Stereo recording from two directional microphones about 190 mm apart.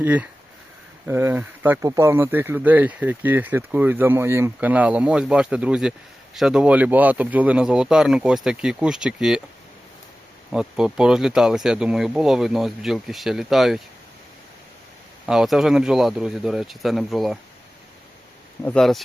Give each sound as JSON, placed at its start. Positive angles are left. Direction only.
{"t": 0.0, "sound": "speech", "side_deg": -10}
{"t": 10.5, "sound": "speech", "side_deg": -5}
{"t": 15.3, "sound": "speech", "side_deg": -5}
{"t": 18.6, "sound": "speech", "side_deg": 5}